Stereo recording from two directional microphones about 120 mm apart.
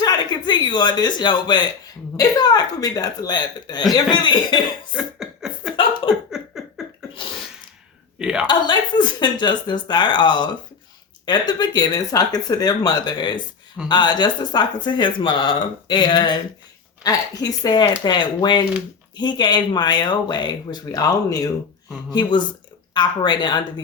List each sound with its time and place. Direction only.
0.0 s speech: 35° left (ahead or behind)
4.9 s laughter: 5° right (ahead or behind)
6.3 s a sound: 5° right (ahead or behind)
8.2 s a woman's voice: 5° right (ahead or behind)
8.4 s speech: 40° left (ahead or behind)